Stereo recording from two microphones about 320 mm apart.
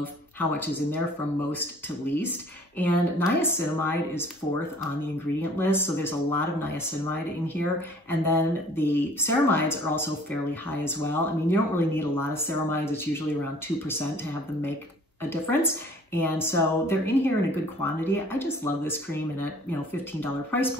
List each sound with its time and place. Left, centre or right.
0.0 s speech: centre
2.0 s speech: centre
15.2 s speech: centre